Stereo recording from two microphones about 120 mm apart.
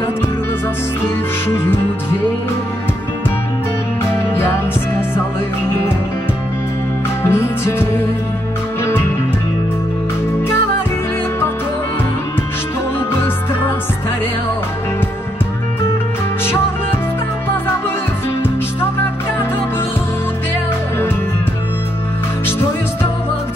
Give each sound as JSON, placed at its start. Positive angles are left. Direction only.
{"t": 7.2, "sound": "music", "side_deg": 20}